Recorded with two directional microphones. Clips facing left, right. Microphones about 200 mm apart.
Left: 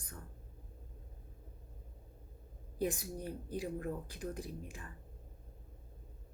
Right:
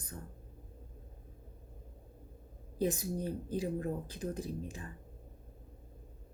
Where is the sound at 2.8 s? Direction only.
20° right (ahead or behind).